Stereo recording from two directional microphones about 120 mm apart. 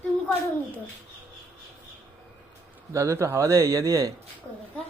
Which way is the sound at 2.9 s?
25° right (ahead or behind).